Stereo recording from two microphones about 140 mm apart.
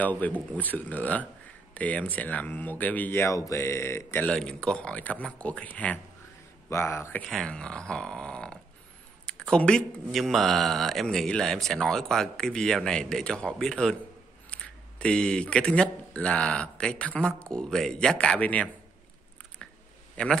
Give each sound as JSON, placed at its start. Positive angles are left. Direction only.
{"t": 0.0, "sound": "speech", "side_deg": 10}
{"t": 7.2, "sound": "speech", "side_deg": 5}
{"t": 20.2, "sound": "speech", "side_deg": 10}